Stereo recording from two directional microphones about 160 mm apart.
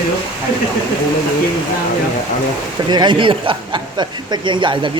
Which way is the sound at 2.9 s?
30° right (ahead or behind).